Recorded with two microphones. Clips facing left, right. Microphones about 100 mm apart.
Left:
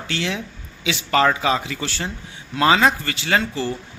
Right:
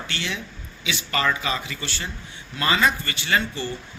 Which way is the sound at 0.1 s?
90° left.